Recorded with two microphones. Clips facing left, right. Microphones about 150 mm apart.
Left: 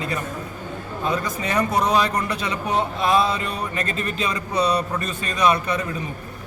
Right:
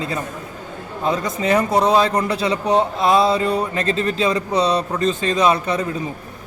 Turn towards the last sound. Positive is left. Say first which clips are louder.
# right 3 dB
turn(degrees=-25)  # may be behind; listen again after turning